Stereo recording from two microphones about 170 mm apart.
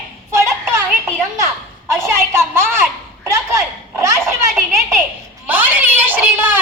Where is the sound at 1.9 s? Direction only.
15° right (ahead or behind).